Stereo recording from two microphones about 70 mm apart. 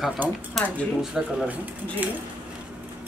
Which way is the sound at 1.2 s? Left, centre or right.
Centre.